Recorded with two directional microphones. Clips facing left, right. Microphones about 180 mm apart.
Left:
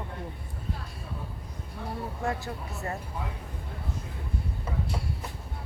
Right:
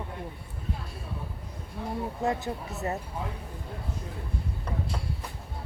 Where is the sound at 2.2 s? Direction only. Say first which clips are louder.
Right 3 dB; 20° right (ahead or behind).